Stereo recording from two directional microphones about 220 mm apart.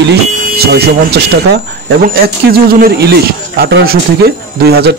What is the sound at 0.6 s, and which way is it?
Speech, 45° right (ahead or behind).